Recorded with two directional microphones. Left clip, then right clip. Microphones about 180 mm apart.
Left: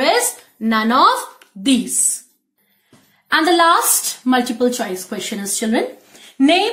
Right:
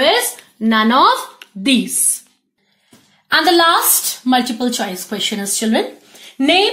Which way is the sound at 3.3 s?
35° right (ahead or behind).